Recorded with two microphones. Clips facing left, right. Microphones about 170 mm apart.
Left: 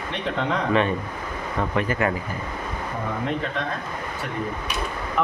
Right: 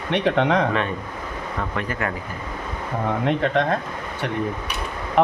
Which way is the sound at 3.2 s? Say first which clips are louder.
Right 8 dB; 70° right (ahead or behind).